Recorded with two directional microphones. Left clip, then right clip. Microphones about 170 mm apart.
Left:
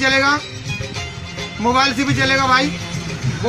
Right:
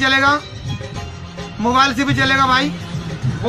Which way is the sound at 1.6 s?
20° right (ahead or behind).